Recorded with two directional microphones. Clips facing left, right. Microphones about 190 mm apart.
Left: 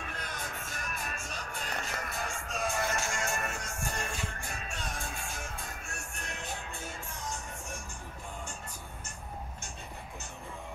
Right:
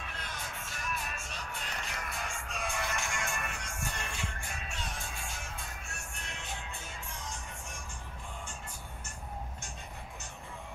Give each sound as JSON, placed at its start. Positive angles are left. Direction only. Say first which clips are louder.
{"t": 0.0, "sound": "music", "louder": "left 3 dB", "side_deg": 45}
{"t": 6.2, "sound": "music", "louder": "left 6 dB", "side_deg": 45}